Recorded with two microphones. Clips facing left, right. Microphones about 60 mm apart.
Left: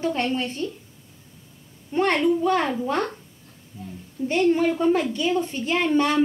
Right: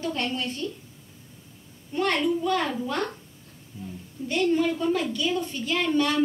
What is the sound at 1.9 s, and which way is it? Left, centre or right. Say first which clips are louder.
A woman's voice: left 4 dB; left.